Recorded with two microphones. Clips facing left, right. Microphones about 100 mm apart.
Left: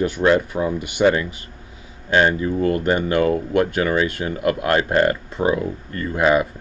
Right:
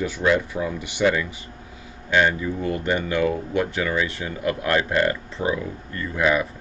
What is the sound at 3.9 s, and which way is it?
Speech, 35° left (ahead or behind).